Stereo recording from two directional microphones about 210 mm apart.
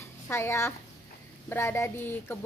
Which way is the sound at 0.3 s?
10° left (ahead or behind).